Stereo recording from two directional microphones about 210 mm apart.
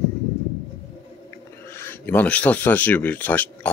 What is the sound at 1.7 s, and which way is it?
Speech, 10° left (ahead or behind).